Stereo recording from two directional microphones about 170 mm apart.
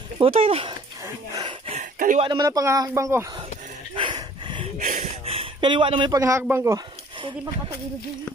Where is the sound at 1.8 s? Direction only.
50° right (ahead or behind).